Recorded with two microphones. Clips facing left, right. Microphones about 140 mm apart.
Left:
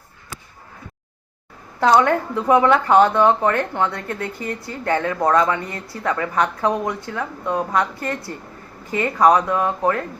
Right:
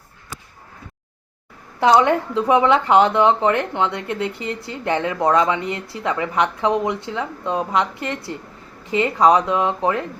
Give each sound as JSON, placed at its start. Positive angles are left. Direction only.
{"t": 1.8, "sound": "speech", "side_deg": -15}